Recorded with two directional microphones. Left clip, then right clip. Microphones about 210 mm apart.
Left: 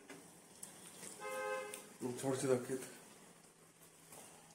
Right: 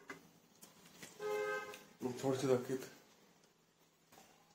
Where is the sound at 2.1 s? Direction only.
Centre (ahead or behind).